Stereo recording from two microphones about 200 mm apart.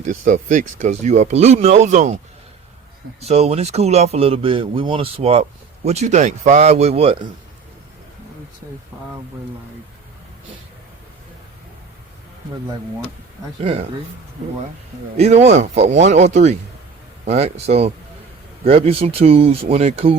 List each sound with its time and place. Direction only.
0.0 s speech: 35° right (ahead or behind)
13.6 s speech: 30° right (ahead or behind)
15.2 s speech: 35° right (ahead or behind)